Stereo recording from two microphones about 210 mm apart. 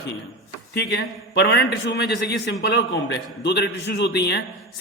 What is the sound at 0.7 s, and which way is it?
A man's voice, 50° left (ahead or behind).